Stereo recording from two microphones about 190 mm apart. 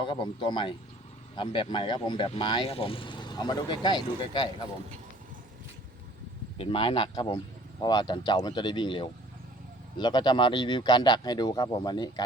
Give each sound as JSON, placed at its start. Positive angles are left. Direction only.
{"t": 0.0, "sound": "speech", "side_deg": 25}
{"t": 6.6, "sound": "speech", "side_deg": 25}